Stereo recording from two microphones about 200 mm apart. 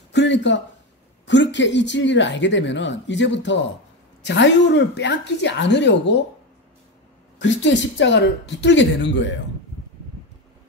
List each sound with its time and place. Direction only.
0.1 s a sound: 60° left (ahead or behind)
1.2 s speech: 65° left (ahead or behind)
7.3 s speech: 65° left (ahead or behind)